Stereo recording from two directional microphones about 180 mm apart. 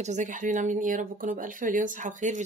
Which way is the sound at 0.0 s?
40° right (ahead or behind).